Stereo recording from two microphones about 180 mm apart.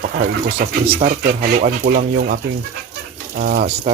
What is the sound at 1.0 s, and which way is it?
Speech, 55° right (ahead or behind).